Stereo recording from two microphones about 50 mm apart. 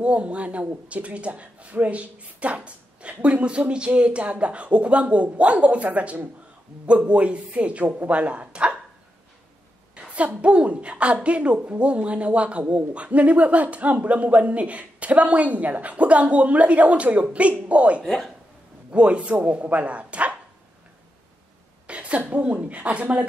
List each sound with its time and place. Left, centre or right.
0.0 s speech: right
9.9 s a woman's voice: right
18.0 s speech: centre
18.9 s speech: right
21.8 s a sound: right
22.2 s speech: right